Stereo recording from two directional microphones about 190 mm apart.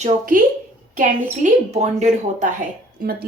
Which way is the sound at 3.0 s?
50° right (ahead or behind).